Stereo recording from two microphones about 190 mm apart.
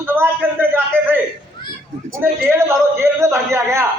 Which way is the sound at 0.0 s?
10° right (ahead or behind).